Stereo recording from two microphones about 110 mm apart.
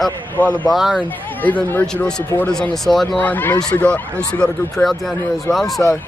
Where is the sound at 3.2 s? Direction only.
15° left (ahead or behind).